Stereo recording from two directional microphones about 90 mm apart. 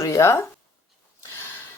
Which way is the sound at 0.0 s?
35° left (ahead or behind).